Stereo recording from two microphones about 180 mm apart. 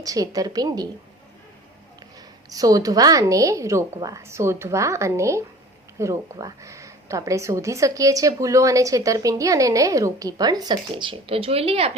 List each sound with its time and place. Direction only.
0.0 s a woman's voice: 20° right (ahead or behind)
2.5 s a woman's voice: 20° right (ahead or behind)